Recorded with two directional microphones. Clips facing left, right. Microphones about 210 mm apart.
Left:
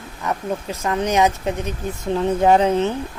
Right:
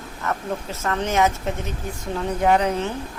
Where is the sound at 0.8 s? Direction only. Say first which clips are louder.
Left 3 dB; 15° left (ahead or behind).